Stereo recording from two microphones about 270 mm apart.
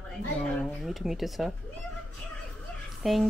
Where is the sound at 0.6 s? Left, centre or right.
Centre.